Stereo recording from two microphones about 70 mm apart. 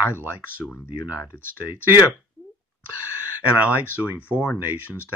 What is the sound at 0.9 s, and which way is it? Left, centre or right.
Speech, right.